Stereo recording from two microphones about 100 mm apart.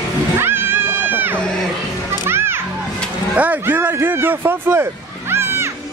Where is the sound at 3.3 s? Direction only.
15° right (ahead or behind).